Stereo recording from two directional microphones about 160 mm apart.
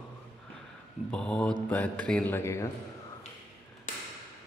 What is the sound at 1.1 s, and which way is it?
A man's voice, 5° left (ahead or behind).